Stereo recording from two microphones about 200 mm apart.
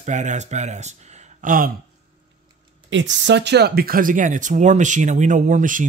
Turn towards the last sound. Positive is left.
turn(degrees=-40)  # may be behind; listen again after turning